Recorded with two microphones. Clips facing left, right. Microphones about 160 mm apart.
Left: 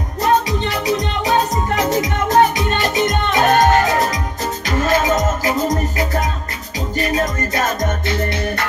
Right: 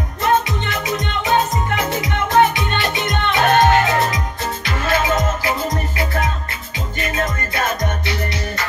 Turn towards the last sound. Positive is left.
turn(degrees=40)  # may be behind; listen again after turning